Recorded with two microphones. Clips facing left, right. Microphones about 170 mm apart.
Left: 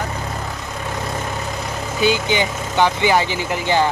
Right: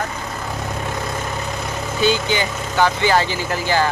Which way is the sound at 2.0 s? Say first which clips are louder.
Left 1 dB; 15° left (ahead or behind).